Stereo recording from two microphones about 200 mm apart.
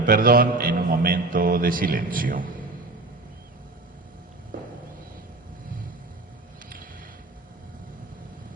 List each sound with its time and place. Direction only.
0.0 s a man's voice: 45° right (ahead or behind)